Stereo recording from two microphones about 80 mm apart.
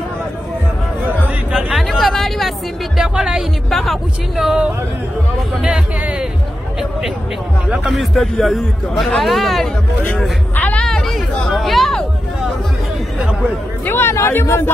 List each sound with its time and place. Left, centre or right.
1.7 s a sound: centre
3.0 s a man's voice: centre
5.6 s speech: centre
7.9 s a man's voice: centre
10.5 s hubbub: centre
10.9 s hubbub: centre
13.8 s speech: left